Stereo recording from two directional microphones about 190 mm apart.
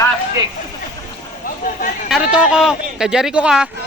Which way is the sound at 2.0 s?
5° right (ahead or behind).